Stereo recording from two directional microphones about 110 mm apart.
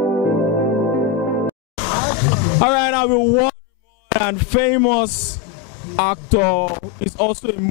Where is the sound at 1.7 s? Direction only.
15° left (ahead or behind).